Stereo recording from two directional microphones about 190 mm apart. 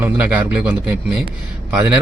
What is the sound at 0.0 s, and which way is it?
Speech, 10° right (ahead or behind).